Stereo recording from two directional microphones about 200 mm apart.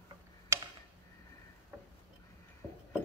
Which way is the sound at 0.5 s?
15° right (ahead or behind).